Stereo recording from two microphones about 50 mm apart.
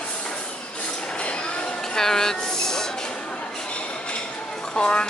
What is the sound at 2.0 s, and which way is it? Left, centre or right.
Train, centre.